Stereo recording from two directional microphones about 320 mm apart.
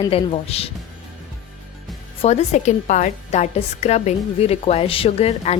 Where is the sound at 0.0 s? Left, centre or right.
Centre.